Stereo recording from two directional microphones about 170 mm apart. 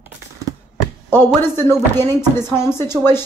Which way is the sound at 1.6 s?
15° left (ahead or behind).